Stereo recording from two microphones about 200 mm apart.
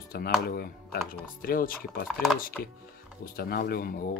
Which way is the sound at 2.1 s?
5° left (ahead or behind).